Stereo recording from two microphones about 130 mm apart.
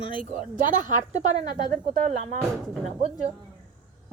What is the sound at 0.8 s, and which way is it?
Speech, 65° right (ahead or behind).